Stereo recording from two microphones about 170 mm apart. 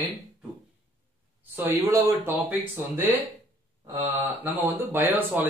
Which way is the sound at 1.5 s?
15° right (ahead or behind).